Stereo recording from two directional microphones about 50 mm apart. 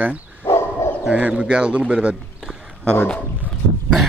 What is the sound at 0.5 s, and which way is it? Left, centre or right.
Bow-wow, left.